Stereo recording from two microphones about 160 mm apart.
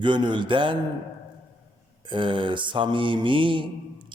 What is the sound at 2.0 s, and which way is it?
Mantra, 30° right (ahead or behind).